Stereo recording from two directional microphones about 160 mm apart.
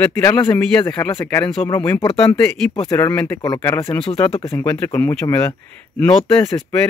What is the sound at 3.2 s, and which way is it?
Speech, 25° left (ahead or behind).